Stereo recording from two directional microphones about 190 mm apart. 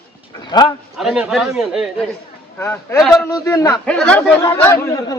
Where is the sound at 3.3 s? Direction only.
20° left (ahead or behind).